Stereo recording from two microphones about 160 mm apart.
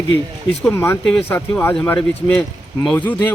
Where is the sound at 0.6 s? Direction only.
15° left (ahead or behind).